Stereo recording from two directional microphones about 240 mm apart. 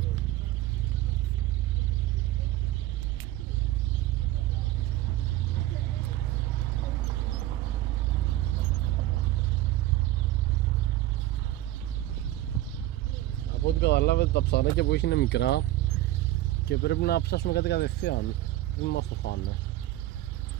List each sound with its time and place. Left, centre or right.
13.7 s speech: left
16.6 s speech: left